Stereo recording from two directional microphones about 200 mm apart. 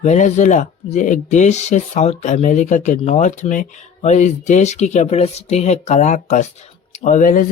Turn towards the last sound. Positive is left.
turn(degrees=40)  # may be behind; listen again after turning